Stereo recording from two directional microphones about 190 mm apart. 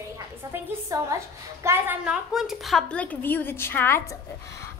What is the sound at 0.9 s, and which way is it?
A woman's voice, 15° right (ahead or behind).